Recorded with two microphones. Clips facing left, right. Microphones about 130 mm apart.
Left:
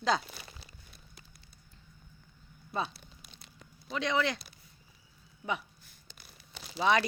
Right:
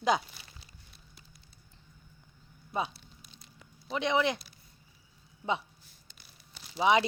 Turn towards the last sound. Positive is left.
turn(degrees=-20)  # may be behind; listen again after turning